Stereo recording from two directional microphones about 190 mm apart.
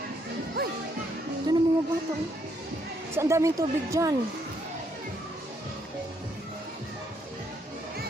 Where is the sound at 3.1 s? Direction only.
15° right (ahead or behind).